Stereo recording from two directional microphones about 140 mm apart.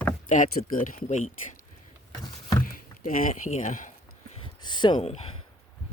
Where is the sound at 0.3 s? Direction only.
70° left (ahead or behind).